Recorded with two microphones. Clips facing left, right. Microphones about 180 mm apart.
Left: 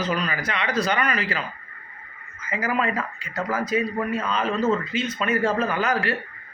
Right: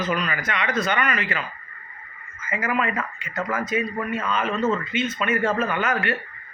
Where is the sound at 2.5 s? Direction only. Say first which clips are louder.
Even; 35° left (ahead or behind).